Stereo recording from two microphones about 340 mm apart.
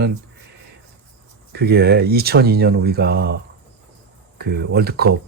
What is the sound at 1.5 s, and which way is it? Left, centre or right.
Speech, right.